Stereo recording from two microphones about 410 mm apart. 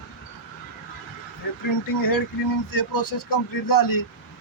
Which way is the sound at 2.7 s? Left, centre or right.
Left.